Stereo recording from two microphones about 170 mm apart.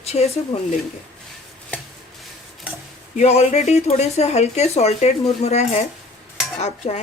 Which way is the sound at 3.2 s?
40° left (ahead or behind).